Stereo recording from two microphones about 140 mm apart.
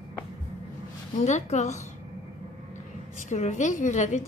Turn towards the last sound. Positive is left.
turn(degrees=60)  # may be behind; listen again after turning